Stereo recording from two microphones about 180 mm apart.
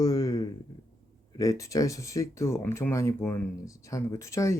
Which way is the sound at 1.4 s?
20° left (ahead or behind).